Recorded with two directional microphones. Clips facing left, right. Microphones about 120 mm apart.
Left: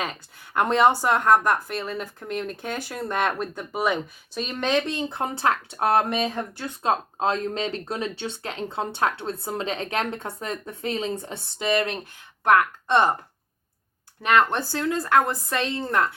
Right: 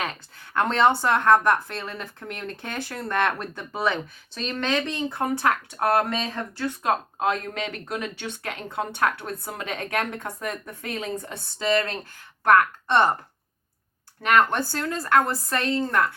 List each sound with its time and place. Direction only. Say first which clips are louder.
0.6 s speech: left 1 dB; 15° left (ahead or behind)
14.2 s speech: even; 20° left (ahead or behind)